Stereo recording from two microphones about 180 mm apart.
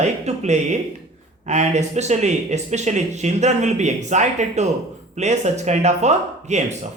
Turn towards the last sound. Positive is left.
turn(degrees=-40)  # may be behind; listen again after turning